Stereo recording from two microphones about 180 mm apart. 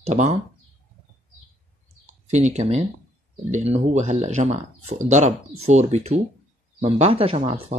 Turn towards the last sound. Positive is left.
turn(degrees=-30)  # may be behind; listen again after turning